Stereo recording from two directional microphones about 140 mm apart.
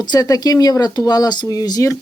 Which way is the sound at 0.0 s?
30° left (ahead or behind).